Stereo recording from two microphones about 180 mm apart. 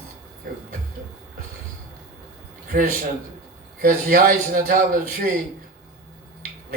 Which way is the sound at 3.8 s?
55° right (ahead or behind).